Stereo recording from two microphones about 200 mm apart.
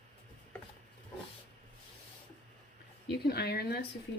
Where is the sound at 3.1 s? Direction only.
55° left (ahead or behind).